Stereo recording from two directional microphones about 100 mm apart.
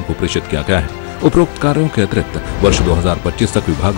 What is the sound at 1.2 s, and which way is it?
Speech, centre (ahead or behind).